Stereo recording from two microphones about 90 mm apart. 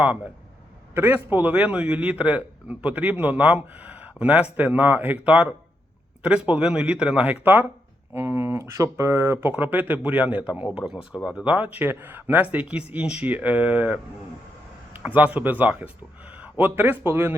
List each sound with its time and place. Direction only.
0.9 s speech: 20° right (ahead or behind)
8.1 s speech: 30° right (ahead or behind)